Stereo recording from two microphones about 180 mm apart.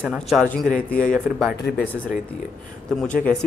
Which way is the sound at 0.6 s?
50° left (ahead or behind).